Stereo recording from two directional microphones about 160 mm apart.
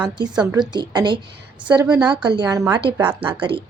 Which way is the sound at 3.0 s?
10° right (ahead or behind).